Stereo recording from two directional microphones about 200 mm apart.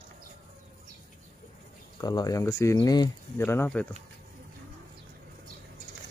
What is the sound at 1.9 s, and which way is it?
Speech, 20° left (ahead or behind).